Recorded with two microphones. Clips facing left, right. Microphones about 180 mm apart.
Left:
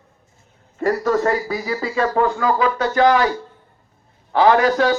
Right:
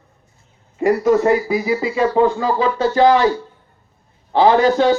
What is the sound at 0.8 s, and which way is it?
A man's voice, 15° right (ahead or behind).